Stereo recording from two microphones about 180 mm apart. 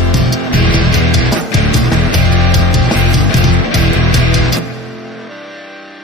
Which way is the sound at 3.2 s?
Centre (ahead or behind).